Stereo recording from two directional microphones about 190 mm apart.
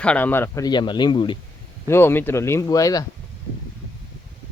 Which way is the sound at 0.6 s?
25° left (ahead or behind).